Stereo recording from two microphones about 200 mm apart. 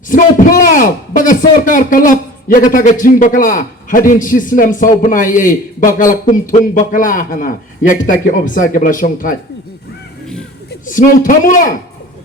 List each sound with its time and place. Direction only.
0.1 s a man's voice: 40° left (ahead or behind)
10.8 s a man's voice: 40° left (ahead or behind)